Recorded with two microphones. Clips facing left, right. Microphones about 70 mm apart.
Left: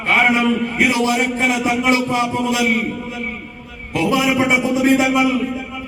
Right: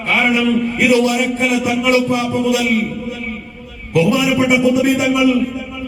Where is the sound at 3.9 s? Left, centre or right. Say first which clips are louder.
Right 3 dB; left.